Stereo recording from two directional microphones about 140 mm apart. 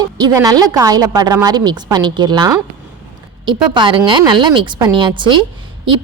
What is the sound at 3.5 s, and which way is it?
A woman's voice, 35° right (ahead or behind).